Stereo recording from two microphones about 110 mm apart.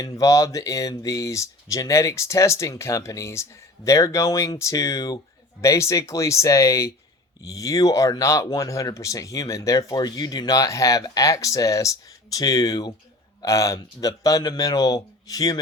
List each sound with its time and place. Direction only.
0.0 s speech: 30° left (ahead or behind)